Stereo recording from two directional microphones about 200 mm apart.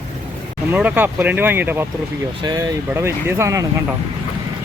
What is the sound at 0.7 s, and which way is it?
Speech, 10° right (ahead or behind).